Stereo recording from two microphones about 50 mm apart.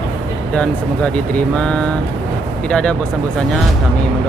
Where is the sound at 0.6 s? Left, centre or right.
Left.